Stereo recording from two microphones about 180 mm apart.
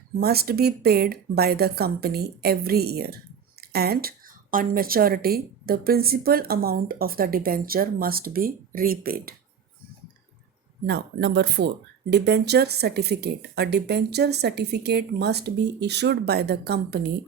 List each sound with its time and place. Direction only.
0.2 s speech: 60° right (ahead or behind)
10.8 s speech: 70° right (ahead or behind)